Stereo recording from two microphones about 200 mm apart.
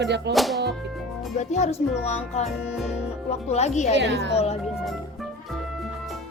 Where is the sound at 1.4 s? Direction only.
35° left (ahead or behind).